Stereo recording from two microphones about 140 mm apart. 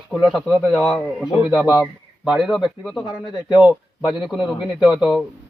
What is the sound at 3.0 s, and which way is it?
Speech, 30° left (ahead or behind).